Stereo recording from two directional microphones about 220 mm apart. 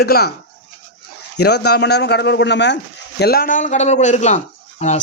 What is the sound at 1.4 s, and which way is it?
Speech, 50° left (ahead or behind).